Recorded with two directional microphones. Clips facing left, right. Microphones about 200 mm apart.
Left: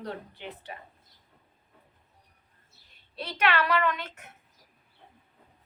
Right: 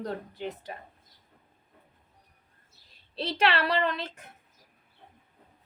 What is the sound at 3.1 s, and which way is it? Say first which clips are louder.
A woman's voice: right 1 dB; 30° right (ahead or behind).